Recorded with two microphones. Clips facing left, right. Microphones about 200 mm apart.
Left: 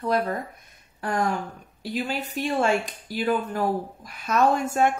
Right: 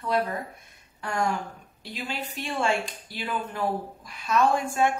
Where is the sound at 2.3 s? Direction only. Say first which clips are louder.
Left 4 dB; 40° left (ahead or behind).